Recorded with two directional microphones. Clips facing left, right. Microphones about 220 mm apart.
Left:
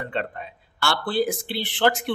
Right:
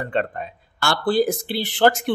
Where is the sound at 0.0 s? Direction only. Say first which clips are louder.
Right 5 dB; 45° right (ahead or behind).